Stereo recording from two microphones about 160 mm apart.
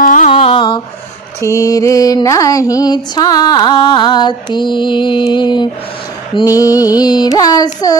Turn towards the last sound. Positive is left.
turn(degrees=25)  # may be behind; listen again after turning